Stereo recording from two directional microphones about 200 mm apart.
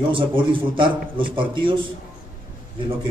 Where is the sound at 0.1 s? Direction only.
25° right (ahead or behind).